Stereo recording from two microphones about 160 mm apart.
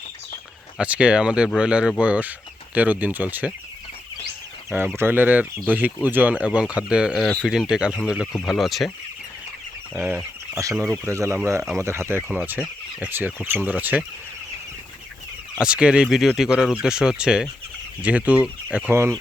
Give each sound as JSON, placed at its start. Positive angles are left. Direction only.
{"t": 0.8, "sound": "speech", "side_deg": -5}
{"t": 4.9, "sound": "speech", "side_deg": -10}
{"t": 9.9, "sound": "speech", "side_deg": -10}
{"t": 15.5, "sound": "speech", "side_deg": -5}